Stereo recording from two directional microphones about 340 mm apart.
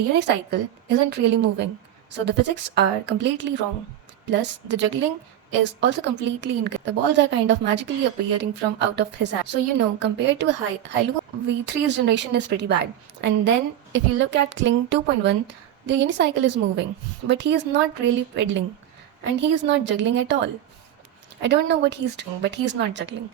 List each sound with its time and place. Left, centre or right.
0.1 s speech: right